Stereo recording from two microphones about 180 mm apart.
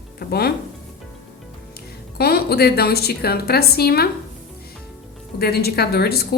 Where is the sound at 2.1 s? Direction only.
60° left (ahead or behind).